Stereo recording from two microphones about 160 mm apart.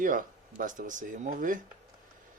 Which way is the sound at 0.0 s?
55° right (ahead or behind).